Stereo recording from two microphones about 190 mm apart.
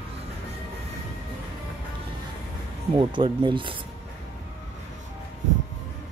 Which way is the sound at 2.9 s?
25° right (ahead or behind).